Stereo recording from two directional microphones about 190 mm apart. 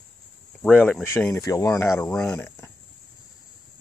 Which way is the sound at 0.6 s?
5° left (ahead or behind).